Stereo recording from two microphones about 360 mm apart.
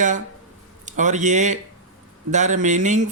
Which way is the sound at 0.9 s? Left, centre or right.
Centre.